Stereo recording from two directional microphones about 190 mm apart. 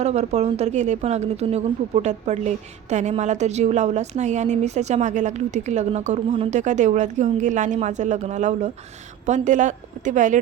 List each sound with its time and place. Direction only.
0.0 s a woman's voice: 35° right (ahead or behind)